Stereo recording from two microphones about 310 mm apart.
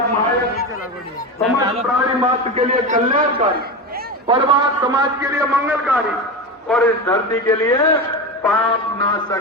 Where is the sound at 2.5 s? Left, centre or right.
Right.